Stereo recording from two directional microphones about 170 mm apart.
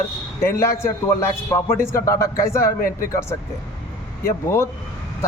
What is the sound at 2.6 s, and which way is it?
Speech, 55° left (ahead or behind).